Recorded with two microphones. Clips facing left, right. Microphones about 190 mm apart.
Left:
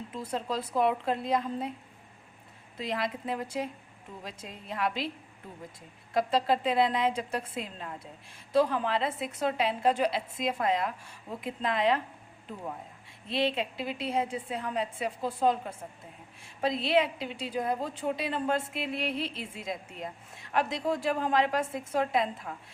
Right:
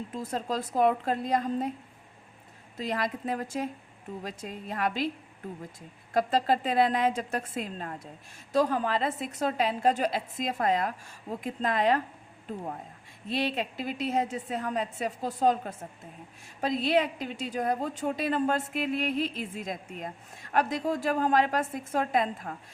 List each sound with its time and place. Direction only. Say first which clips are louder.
0.3 s a woman's voice: right 1 dB; 45° right (ahead or behind)
2.7 s a woman's voice: right 2 dB; 45° right (ahead or behind)
6.1 s a woman's voice: right 1 dB; 45° right (ahead or behind)
13.2 s a woman's voice: left 1 dB; 45° right (ahead or behind)
16.8 s a woman's voice: right 1 dB; 45° right (ahead or behind)